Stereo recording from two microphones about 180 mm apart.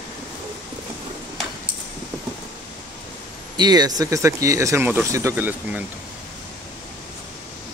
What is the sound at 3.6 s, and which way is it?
Speech, 20° right (ahead or behind).